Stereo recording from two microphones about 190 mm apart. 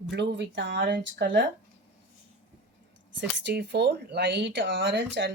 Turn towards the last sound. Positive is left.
turn(degrees=-65)  # may be behind; listen again after turning